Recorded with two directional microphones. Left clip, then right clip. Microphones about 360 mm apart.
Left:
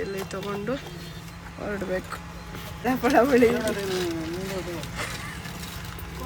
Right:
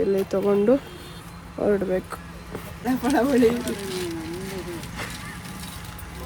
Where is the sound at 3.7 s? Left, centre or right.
Left.